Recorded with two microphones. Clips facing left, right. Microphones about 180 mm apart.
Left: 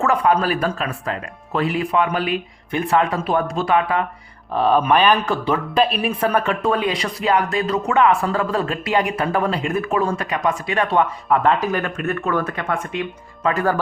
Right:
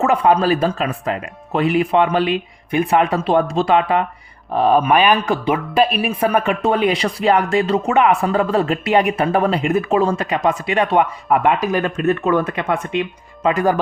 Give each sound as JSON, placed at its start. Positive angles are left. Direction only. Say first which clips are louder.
{"t": 0.0, "sound": "a woman's voice", "louder": "right 3 dB", "side_deg": -20}
{"t": 4.5, "sound": "a woman's voice", "louder": "right 2 dB", "side_deg": -10}